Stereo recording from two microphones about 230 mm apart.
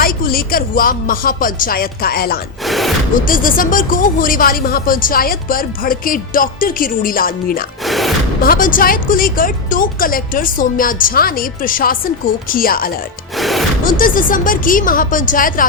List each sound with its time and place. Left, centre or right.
0.0 s speech: left
2.6 s speech: centre
3.2 s speech: left
7.9 s speech: centre
8.4 s speech: left
13.3 s music: centre
14.0 s speech: left